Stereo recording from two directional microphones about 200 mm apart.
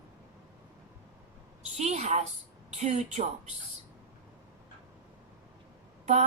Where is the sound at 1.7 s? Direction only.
35° right (ahead or behind).